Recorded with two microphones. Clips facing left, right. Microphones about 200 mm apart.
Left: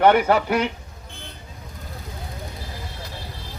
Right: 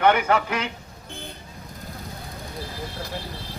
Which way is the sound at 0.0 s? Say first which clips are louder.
Left 3 dB; 40° left (ahead or behind).